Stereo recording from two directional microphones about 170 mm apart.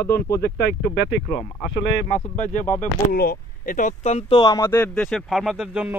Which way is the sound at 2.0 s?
45° left (ahead or behind).